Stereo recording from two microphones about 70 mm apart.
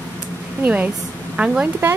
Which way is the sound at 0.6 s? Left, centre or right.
Right.